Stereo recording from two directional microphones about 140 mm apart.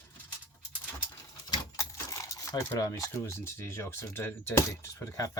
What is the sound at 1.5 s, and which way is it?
Speech, 20° left (ahead or behind).